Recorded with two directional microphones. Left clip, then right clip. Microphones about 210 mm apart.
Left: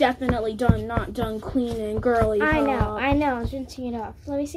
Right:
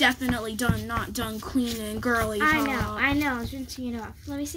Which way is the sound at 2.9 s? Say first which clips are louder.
Left 3 dB; 20° right (ahead or behind).